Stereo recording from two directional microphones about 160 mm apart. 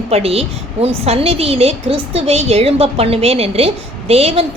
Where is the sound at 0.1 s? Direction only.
40° right (ahead or behind).